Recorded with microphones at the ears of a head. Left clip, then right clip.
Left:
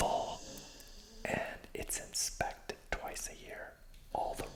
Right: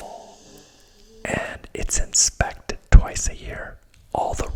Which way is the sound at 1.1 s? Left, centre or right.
Right.